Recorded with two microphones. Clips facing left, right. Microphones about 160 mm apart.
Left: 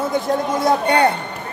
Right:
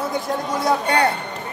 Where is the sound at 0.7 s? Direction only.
25° left (ahead or behind).